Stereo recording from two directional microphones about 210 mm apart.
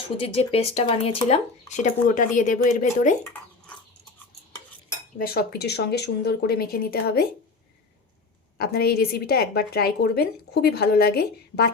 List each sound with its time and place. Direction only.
0.2 s speech: 25° left (ahead or behind)
1.7 s speech: 35° left (ahead or behind)
5.1 s a woman's voice: 45° left (ahead or behind)
8.5 s a woman's voice: 45° left (ahead or behind)